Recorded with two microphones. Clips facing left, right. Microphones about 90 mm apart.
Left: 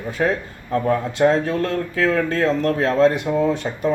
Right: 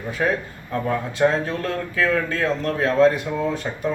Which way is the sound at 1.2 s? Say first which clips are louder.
Left 3 dB; 35° left (ahead or behind).